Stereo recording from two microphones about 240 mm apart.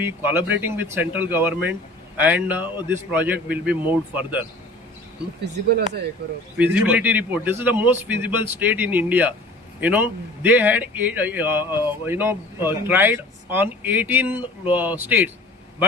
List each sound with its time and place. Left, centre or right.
0.0 s a man's voice: centre
5.6 s speech: right
6.6 s a man's voice: centre